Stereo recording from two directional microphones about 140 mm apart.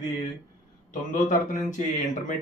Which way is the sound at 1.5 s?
60° left (ahead or behind).